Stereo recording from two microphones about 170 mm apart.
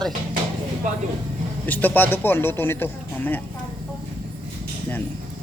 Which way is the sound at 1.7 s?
10° left (ahead or behind).